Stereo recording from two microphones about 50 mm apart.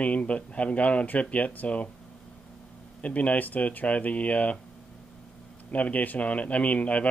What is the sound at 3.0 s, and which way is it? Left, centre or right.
Speech, left.